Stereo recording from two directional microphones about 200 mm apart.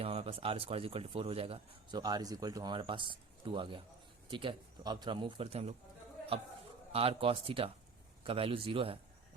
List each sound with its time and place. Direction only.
0.0 s a man's voice: 30° right (ahead or behind)
6.9 s a man's voice: 30° right (ahead or behind)